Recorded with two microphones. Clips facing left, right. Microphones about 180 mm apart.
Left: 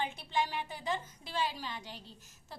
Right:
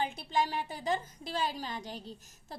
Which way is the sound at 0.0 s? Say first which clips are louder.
Right 3 dB; 35° right (ahead or behind).